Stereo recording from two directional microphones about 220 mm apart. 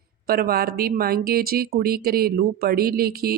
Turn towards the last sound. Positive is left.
turn(degrees=-45)  # may be behind; listen again after turning